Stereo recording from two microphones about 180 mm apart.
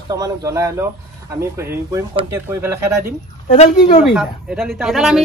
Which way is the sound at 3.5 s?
40° left (ahead or behind).